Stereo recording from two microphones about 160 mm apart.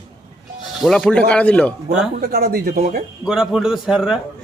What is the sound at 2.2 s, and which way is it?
Speech, 70° right (ahead or behind).